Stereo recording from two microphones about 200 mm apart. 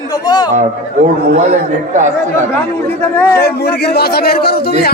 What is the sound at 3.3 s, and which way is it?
Speech, 55° left (ahead or behind).